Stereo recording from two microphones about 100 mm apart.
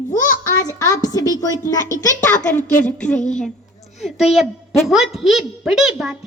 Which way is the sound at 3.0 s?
10° left (ahead or behind).